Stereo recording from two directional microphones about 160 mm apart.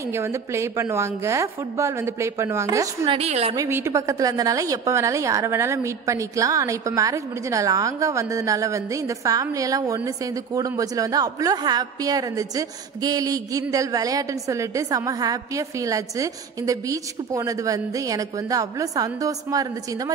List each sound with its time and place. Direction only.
0.1 s a woman's voice: 15° right (ahead or behind)
3.1 s a woman's voice: 40° right (ahead or behind)
3.5 s a woman's voice: 15° right (ahead or behind)